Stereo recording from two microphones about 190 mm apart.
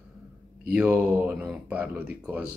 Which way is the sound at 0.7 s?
10° right (ahead or behind).